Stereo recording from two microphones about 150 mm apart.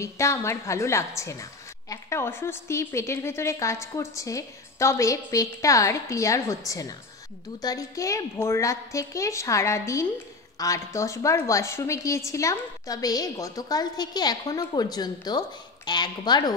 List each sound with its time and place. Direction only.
0.0 s a woman's voice: 20° left (ahead or behind)